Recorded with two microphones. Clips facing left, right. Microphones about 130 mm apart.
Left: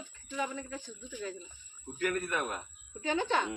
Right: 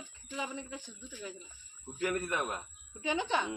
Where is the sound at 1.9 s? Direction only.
25° right (ahead or behind).